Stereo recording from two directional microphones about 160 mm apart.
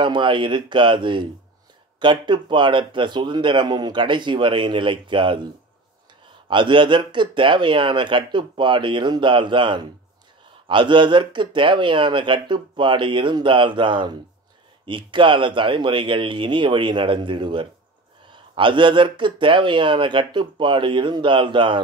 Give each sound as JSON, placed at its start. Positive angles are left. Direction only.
{"t": 0.0, "sound": "speech", "side_deg": -30}
{"t": 6.5, "sound": "speech", "side_deg": -30}